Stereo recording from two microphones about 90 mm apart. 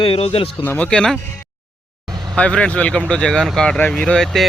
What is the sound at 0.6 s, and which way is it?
Speech, 20° left (ahead or behind).